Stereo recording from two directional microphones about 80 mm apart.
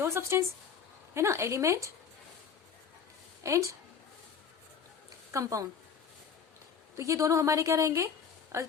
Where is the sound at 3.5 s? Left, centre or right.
Right.